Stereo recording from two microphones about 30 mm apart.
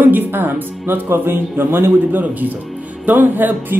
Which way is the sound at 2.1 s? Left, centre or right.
Right.